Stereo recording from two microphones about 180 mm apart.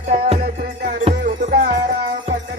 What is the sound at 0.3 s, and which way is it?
Music, 55° right (ahead or behind).